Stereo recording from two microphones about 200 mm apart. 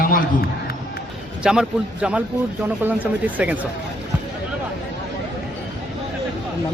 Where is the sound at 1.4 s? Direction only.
5° right (ahead or behind).